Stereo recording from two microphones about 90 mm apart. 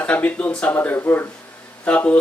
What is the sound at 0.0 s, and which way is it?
Speech, 15° left (ahead or behind).